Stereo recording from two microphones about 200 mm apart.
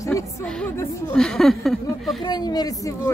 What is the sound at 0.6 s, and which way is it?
Speech, 5° left (ahead or behind).